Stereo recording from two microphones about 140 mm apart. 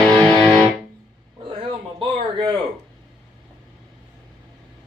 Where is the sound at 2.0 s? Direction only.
35° right (ahead or behind).